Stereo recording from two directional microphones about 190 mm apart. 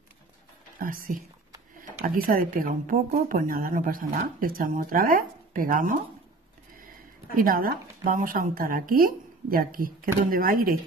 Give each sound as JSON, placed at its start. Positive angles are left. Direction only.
{"t": 0.7, "sound": "a woman's voice", "side_deg": -45}
{"t": 7.3, "sound": "speech", "side_deg": -50}